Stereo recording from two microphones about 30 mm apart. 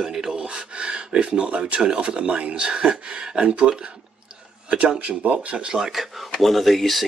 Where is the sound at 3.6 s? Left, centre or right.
Right.